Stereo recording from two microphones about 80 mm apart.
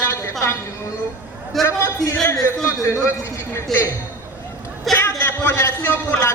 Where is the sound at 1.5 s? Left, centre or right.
Centre.